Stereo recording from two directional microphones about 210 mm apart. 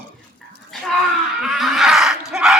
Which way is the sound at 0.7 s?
Centre (ahead or behind).